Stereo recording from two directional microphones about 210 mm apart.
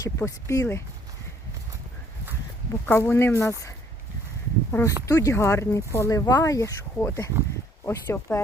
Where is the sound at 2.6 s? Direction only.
10° left (ahead or behind).